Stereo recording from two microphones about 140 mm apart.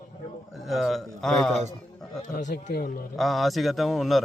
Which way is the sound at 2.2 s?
65° left (ahead or behind).